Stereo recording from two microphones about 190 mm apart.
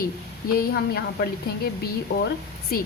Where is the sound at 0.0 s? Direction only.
50° left (ahead or behind).